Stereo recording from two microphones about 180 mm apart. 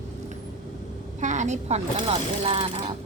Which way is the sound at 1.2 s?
40° right (ahead or behind).